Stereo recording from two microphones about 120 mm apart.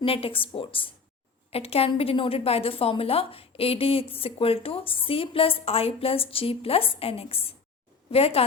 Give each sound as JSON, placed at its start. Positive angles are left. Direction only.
{"t": 0.0, "sound": "a woman's voice", "side_deg": 50}